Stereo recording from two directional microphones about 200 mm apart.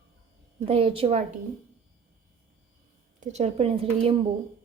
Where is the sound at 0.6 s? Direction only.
30° right (ahead or behind).